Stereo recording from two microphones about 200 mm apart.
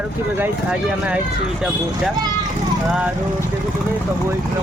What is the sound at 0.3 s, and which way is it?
Speech, 10° right (ahead or behind).